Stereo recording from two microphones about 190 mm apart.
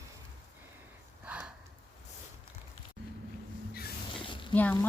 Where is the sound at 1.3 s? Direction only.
5° right (ahead or behind).